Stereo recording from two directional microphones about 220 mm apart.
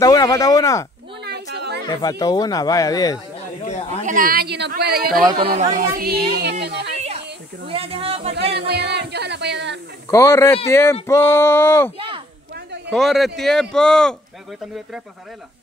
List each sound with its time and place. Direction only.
0.0 s speech: 15° left (ahead or behind)
1.2 s a sound: 50° right (ahead or behind)
1.9 s speech: 20° left (ahead or behind)
4.0 s speech: 40° right (ahead or behind)
5.6 s speech: 35° right (ahead or behind); by 6.9 s 50° right (ahead or behind)
6.9 s a sound: 30° right (ahead or behind)
7.6 s speech: 25° right (ahead or behind)
8.5 s music: 50° right (ahead or behind)
10.0 s speech: 10° left (ahead or behind)
12.9 s speech: centre (ahead or behind)